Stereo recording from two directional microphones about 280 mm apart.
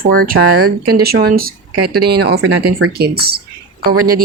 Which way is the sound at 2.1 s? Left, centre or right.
Right.